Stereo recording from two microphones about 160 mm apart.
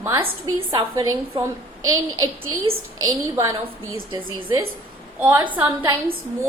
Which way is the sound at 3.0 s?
20° right (ahead or behind).